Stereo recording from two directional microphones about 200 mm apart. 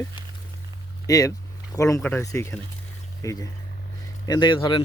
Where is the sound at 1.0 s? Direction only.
15° left (ahead or behind).